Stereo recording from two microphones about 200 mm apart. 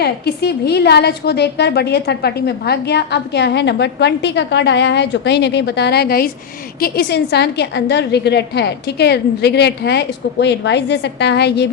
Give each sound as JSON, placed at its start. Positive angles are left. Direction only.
{"t": 0.0, "sound": "a woman's voice", "side_deg": 55}